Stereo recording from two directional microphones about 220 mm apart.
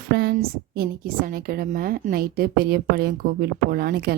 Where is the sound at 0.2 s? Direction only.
45° right (ahead or behind).